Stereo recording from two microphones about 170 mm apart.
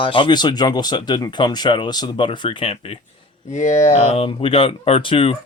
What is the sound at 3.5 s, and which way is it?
Speech, 45° left (ahead or behind).